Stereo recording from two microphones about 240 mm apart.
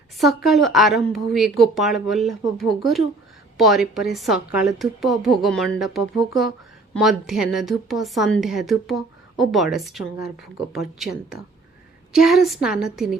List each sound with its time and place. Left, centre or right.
0.4 s a woman's voice: centre